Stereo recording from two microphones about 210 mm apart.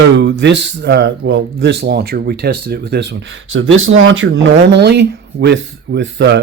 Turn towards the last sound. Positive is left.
turn(degrees=-55)  # may be behind; listen again after turning